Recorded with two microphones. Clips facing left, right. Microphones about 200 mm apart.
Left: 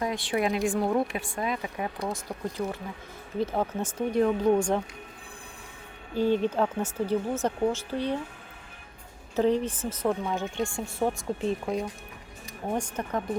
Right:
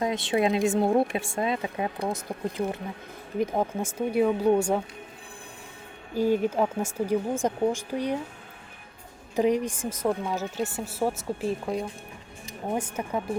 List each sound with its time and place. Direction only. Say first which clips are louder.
0.0 s a woman's voice: right 3 dB; 20° right (ahead or behind)
6.1 s a woman's voice: right 1 dB; 10° right (ahead or behind)
9.3 s a woman's voice: right 1 dB; 15° right (ahead or behind)